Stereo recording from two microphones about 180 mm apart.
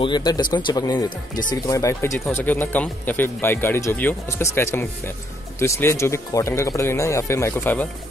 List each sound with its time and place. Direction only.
0.0 s speech: 25° left (ahead or behind)